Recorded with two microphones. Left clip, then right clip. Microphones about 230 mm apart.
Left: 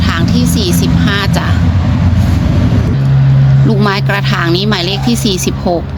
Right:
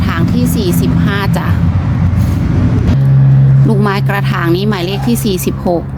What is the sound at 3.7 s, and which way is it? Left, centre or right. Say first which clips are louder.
Speech: left 2 dB; centre.